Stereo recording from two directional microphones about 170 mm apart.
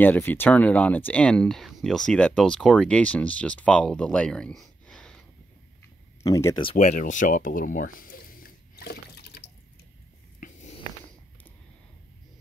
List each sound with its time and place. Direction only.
0.0 s speech: 10° left (ahead or behind)
6.2 s speech: 20° left (ahead or behind)
6.8 s a sound: 45° left (ahead or behind); by 9.5 s 70° left (ahead or behind)